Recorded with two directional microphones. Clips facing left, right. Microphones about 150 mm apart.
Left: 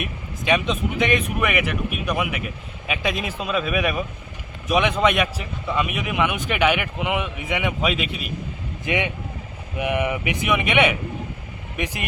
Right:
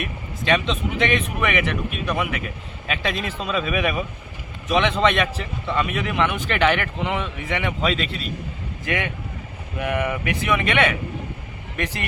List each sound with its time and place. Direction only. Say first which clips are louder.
0.0 s a man's voice: even; 10° left (ahead or behind)
4.7 s a man's voice: even; 10° left (ahead or behind)